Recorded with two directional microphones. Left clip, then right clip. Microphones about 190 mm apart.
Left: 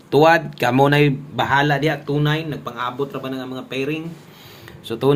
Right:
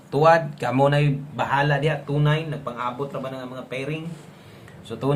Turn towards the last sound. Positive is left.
turn(degrees=35)  # may be behind; listen again after turning